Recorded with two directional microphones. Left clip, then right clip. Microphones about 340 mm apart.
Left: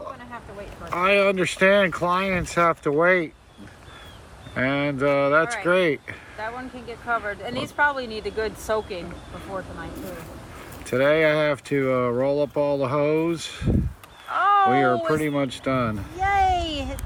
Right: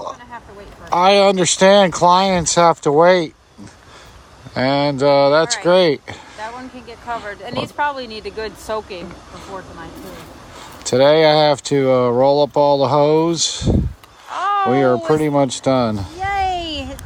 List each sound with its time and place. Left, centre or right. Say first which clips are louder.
0.9 s speech: right 8 dB; centre
4.5 s speech: right 7 dB; centre
10.8 s speech: right 8 dB; centre
14.3 s a sound: right 1 dB; centre